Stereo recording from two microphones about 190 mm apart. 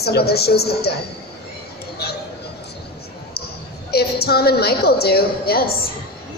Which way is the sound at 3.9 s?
55° left (ahead or behind).